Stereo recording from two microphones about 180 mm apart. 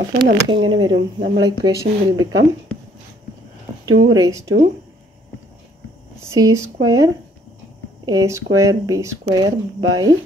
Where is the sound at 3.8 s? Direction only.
90° right.